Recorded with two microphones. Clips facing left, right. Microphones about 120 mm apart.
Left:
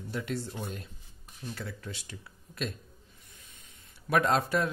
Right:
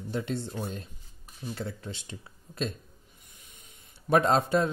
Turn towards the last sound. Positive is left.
turn(degrees=-25)  # may be behind; listen again after turning